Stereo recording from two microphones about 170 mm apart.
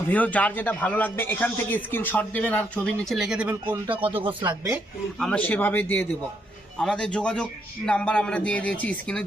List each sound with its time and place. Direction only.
0.1 s a man's voice: 10° left (ahead or behind)
4.0 s speech: 30° right (ahead or behind)
5.2 s a man's voice: 10° left (ahead or behind)